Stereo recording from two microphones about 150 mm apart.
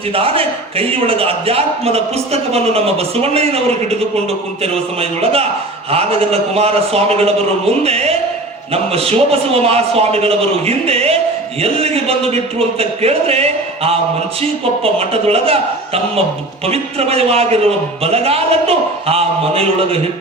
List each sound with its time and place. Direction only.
0.1 s a man's voice: 40° right (ahead or behind)